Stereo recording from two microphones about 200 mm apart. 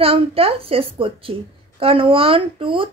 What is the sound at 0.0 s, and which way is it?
A woman's voice, 30° right (ahead or behind).